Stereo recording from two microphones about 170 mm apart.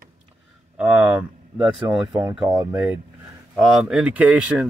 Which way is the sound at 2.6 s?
10° right (ahead or behind).